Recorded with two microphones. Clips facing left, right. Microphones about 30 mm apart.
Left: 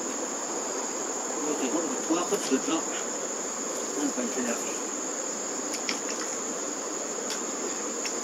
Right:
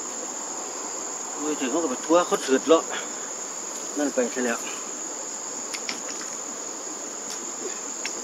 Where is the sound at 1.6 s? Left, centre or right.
Right.